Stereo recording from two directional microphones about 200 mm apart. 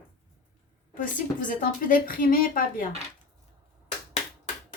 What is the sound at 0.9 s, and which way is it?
A woman's voice, 40° left (ahead or behind).